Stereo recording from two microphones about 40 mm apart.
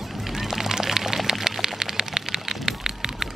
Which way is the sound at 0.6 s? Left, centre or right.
Centre.